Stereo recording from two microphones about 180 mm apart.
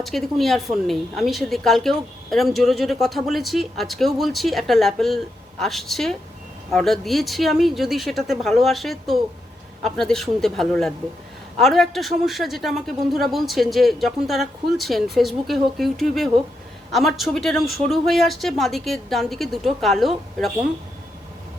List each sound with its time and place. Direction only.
0.0 s a woman's voice: centre (ahead or behind)